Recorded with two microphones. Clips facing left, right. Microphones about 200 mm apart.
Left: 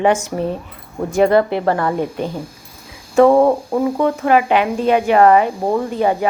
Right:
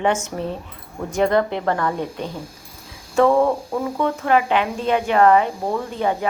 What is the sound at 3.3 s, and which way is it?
Speech, 35° left (ahead or behind).